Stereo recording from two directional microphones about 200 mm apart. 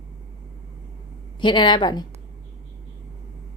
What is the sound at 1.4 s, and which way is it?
Speech, 25° left (ahead or behind).